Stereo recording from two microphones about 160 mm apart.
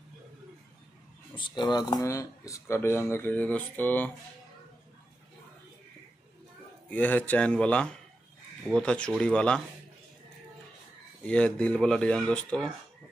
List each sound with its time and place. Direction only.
1.3 s speech: 30° left (ahead or behind); by 4.1 s 10° left (ahead or behind)
6.9 s speech: 10° left (ahead or behind)
11.2 s speech: 5° left (ahead or behind)